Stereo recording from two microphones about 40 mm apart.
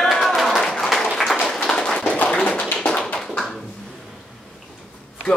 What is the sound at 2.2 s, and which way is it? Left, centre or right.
Tap, left.